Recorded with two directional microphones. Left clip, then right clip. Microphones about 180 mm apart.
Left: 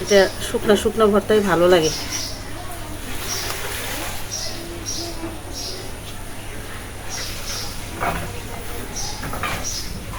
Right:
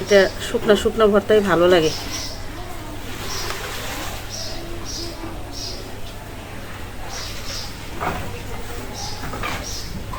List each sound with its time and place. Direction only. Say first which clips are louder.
0.1 s speech: right 1 dB; 5° right (ahead or behind)